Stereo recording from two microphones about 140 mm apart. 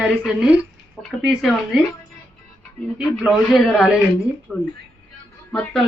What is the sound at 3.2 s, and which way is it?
A woman's voice, centre (ahead or behind).